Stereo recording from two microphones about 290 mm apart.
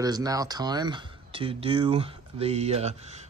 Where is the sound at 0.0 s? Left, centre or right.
Centre.